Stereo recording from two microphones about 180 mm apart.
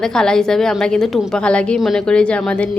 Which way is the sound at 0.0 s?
5° left (ahead or behind).